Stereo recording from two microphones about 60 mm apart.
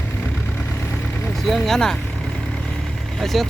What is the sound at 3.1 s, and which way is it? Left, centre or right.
Speech, centre.